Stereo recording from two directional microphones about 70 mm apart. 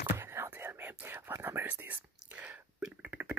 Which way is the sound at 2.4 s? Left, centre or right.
Centre.